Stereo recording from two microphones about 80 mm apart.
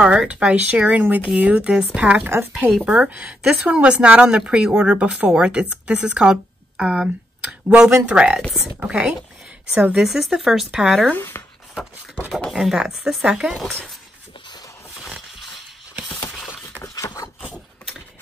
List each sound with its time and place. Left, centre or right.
0.0 s a woman's voice: centre
9.9 s speech: centre
11.1 s speech: left
12.4 s speech: centre
15.0 s a sound: centre
16.8 s a sound: left